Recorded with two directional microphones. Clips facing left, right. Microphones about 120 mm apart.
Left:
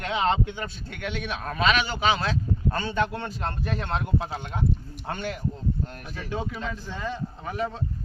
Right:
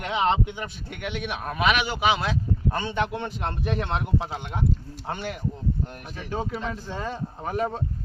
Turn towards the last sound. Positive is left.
turn(degrees=-45)  # may be behind; listen again after turning